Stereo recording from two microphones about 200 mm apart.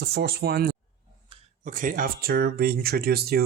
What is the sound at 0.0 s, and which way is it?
Speech, 50° right (ahead or behind).